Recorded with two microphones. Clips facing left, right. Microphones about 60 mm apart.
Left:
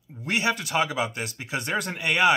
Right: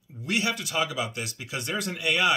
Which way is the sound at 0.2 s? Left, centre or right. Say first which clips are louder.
Left 2 dB; left.